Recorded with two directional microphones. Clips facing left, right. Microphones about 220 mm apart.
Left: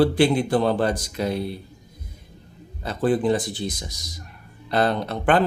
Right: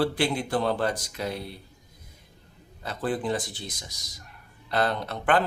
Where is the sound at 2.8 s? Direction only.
25° left (ahead or behind).